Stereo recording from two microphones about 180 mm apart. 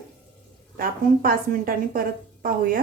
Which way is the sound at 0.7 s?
55° right (ahead or behind).